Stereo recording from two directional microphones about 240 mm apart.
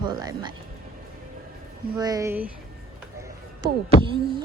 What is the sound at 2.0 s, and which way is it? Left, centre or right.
Speech, centre.